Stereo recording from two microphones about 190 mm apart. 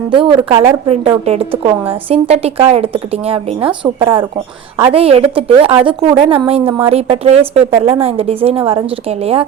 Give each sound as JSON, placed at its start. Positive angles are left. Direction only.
{"t": 0.1, "sound": "a woman's voice", "side_deg": -25}